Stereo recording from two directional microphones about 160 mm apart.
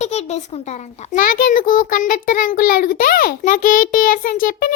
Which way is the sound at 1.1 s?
60° left (ahead or behind).